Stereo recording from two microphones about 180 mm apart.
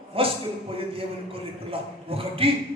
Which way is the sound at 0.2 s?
30° right (ahead or behind).